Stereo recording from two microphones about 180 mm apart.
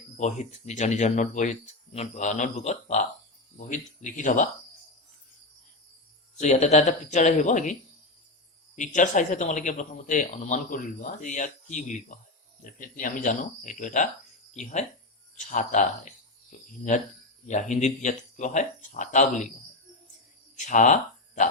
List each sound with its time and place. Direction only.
0.2 s speech: 40° left (ahead or behind)
6.3 s speech: 40° left (ahead or behind)
20.6 s speech: 45° left (ahead or behind)